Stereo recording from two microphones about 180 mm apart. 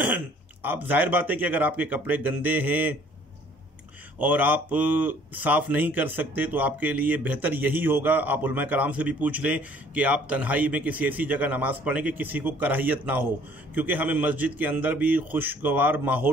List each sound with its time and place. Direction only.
0.0 s speech: 10° right (ahead or behind)
4.2 s speech: 10° right (ahead or behind)